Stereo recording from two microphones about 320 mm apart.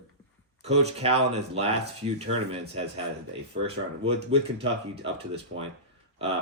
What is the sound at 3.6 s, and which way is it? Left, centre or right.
Speech, centre.